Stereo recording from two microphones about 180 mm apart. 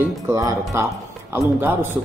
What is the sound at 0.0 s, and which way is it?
Speech, 15° right (ahead or behind).